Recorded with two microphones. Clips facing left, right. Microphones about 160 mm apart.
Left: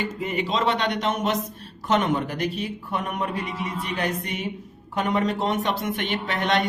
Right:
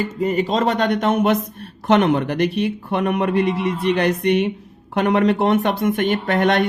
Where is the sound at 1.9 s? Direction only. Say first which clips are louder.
Right 7 dB; 70° right (ahead or behind).